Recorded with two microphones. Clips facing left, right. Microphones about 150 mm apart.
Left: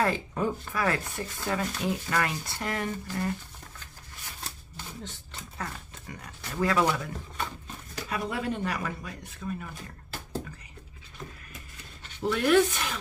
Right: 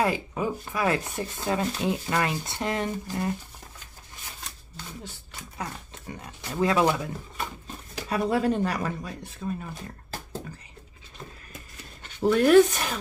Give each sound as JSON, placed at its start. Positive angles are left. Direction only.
{"t": 0.0, "sound": "speech", "side_deg": -10}
{"t": 6.0, "sound": "speech", "side_deg": -25}
{"t": 8.1, "sound": "speech", "side_deg": -35}
{"t": 12.0, "sound": "speech", "side_deg": -45}